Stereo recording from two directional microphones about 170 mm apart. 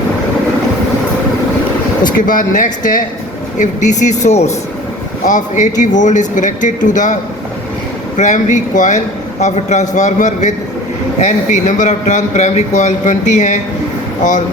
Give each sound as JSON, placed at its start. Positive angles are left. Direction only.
{"t": 2.1, "sound": "speech", "side_deg": 50}